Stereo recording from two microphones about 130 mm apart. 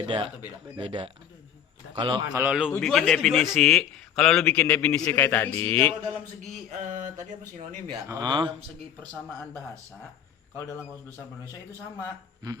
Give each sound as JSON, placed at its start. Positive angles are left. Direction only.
{"t": 0.0, "sound": "speech", "side_deg": -40}
{"t": 2.3, "sound": "a man's voice", "side_deg": -10}
{"t": 2.8, "sound": "a man's voice", "side_deg": 5}
{"t": 8.0, "sound": "speech", "side_deg": -30}